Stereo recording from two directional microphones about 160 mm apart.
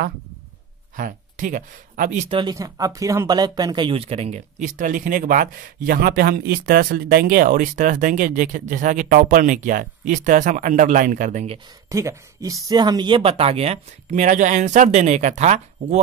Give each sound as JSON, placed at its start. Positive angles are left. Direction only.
{"t": 0.9, "sound": "speech", "side_deg": -50}
{"t": 2.3, "sound": "speech", "side_deg": -25}
{"t": 11.9, "sound": "speech", "side_deg": -20}